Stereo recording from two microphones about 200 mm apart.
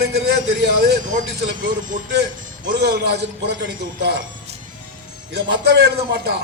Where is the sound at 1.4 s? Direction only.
55° right (ahead or behind).